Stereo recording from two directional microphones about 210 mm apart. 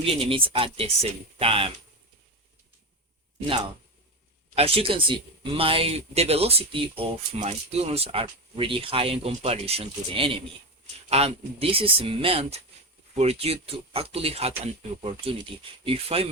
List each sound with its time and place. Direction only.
0.0 s speech: 25° right (ahead or behind)
4.5 s speech: 25° right (ahead or behind)